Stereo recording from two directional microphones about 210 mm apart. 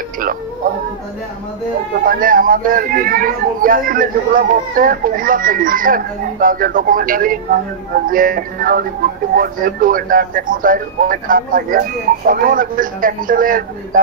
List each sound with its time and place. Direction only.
2.0 s speech: 40° right (ahead or behind)